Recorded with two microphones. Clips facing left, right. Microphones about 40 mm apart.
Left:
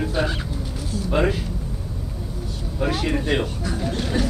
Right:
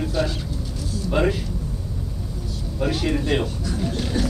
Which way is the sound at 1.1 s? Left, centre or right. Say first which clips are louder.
Even; centre.